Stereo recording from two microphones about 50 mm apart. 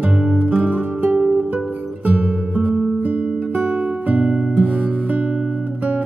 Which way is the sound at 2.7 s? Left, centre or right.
Centre.